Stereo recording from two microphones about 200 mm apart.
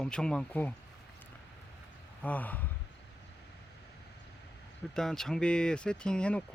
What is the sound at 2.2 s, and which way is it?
Speech, 5° left (ahead or behind).